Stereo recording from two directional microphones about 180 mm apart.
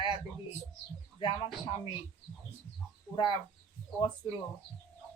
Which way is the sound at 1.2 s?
25° left (ahead or behind).